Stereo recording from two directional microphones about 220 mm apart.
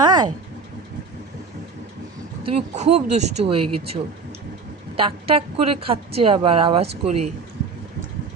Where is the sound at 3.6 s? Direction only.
90° right.